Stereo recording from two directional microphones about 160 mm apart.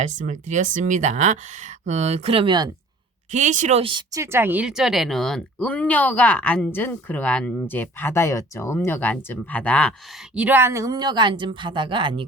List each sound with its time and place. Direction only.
0.0 s speech: 50° right (ahead or behind); by 2.6 s 30° right (ahead or behind)
3.3 s speech: 50° right (ahead or behind)
4.1 s speech: 15° right (ahead or behind); by 9.9 s 10° left (ahead or behind)
10.3 s speech: 10° right (ahead or behind); by 12.2 s 30° right (ahead or behind)